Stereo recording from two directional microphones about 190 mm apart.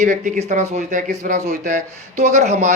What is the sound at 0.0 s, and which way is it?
A man's voice, 40° right (ahead or behind).